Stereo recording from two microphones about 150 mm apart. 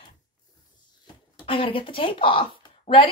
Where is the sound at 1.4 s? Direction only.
35° left (ahead or behind).